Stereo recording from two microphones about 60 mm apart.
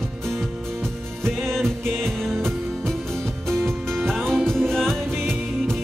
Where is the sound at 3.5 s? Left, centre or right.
Right.